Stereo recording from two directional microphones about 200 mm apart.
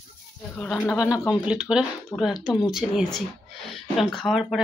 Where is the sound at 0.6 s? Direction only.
5° left (ahead or behind).